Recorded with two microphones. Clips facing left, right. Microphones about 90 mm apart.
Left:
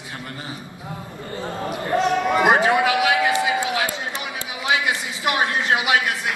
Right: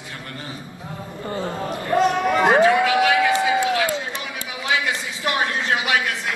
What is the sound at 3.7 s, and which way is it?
Run, 20° left (ahead or behind).